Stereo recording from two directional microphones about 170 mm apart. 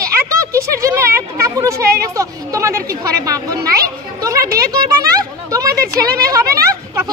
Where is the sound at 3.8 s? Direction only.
20° right (ahead or behind).